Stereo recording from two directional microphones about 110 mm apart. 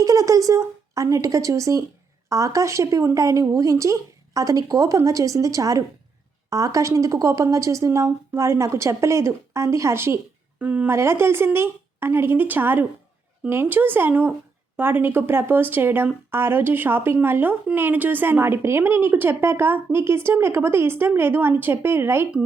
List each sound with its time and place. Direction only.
0.0 s speech: 30° right (ahead or behind)
10.6 s speech: 15° right (ahead or behind)
10.9 s speech: 25° right (ahead or behind)